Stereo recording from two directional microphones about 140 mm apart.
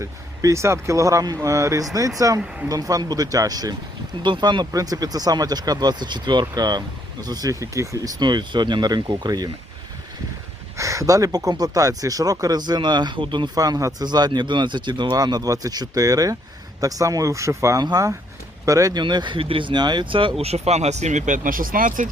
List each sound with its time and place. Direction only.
0.0 s speech: 20° right (ahead or behind)
10.8 s speech: 25° right (ahead or behind)
20.4 s speech: 50° right (ahead or behind); by 22.1 s 70° right (ahead or behind)